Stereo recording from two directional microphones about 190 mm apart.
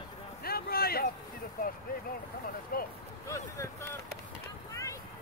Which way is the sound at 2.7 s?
50° left (ahead or behind).